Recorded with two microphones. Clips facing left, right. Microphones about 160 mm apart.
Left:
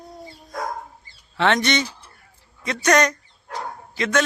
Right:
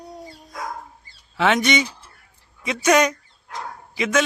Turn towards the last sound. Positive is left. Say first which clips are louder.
# right 1 dB
turn(degrees=-10)  # may be behind; listen again after turning